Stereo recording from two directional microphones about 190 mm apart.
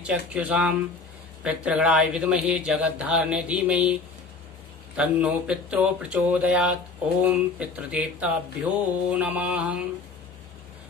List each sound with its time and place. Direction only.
0.3 s speech: 5° right (ahead or behind)